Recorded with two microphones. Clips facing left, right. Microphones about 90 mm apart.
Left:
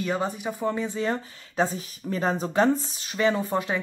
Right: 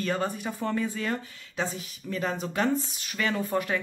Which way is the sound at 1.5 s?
35° left (ahead or behind).